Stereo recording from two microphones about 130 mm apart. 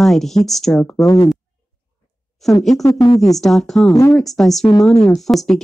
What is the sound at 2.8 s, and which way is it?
Speech, 30° left (ahead or behind).